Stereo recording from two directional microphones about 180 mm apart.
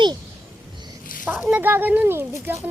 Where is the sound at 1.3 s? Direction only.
10° right (ahead or behind).